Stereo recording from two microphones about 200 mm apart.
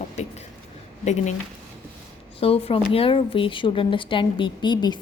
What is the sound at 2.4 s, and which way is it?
Speech, 30° left (ahead or behind).